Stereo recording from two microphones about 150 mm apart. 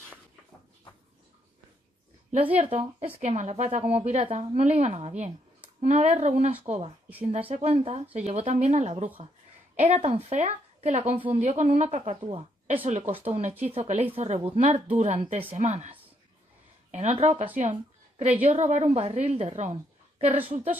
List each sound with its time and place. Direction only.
2.6 s a woman's voice: 40° right (ahead or behind)